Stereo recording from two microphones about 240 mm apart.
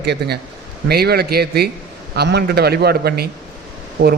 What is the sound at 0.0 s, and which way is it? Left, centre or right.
A man's voice, right.